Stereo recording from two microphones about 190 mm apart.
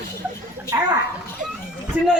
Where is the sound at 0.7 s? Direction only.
15° right (ahead or behind).